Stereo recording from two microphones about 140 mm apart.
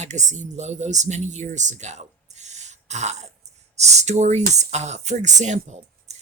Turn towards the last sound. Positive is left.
turn(degrees=-55)  # may be behind; listen again after turning